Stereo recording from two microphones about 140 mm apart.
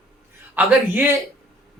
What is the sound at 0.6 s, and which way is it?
Speech, 15° right (ahead or behind).